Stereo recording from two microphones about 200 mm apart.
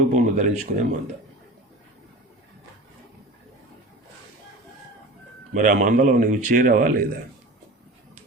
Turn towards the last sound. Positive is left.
turn(degrees=-45)  # may be behind; listen again after turning